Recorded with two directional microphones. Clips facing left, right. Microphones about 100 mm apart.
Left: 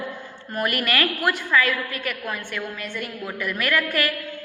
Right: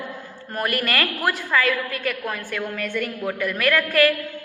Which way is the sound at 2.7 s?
50° right (ahead or behind).